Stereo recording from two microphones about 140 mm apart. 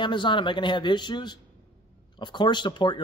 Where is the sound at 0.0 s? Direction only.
35° left (ahead or behind).